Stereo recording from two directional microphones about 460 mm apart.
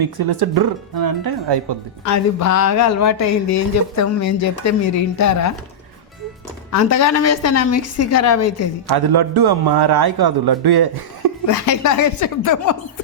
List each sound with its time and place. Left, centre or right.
0.0 s a man's voice: right
2.0 s speech: left
6.7 s speech: left
8.9 s a man's voice: right
11.4 s speech: left